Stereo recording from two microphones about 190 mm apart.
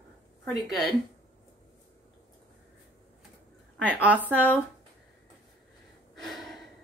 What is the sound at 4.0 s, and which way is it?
Speech, 10° right (ahead or behind).